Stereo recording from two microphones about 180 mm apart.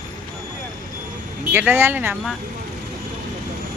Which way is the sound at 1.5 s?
10° right (ahead or behind).